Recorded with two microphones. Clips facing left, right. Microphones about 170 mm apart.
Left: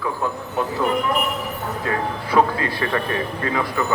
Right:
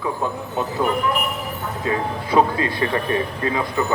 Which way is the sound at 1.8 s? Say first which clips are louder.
Right 2 dB; 20° right (ahead or behind).